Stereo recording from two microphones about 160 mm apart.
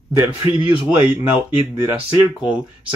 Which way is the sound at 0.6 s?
30° right (ahead or behind).